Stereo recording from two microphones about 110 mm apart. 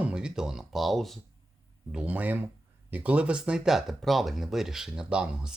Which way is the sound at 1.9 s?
10° right (ahead or behind).